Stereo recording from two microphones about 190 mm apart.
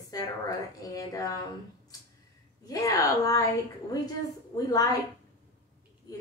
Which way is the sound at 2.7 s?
20° left (ahead or behind).